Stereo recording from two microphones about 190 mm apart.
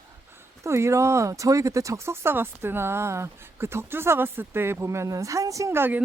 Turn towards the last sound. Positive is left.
turn(degrees=-10)  # may be behind; listen again after turning